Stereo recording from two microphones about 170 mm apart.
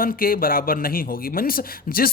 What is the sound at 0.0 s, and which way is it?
A man's voice, 55° left (ahead or behind).